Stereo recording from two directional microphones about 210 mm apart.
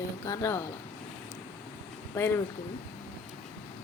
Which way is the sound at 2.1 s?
10° left (ahead or behind).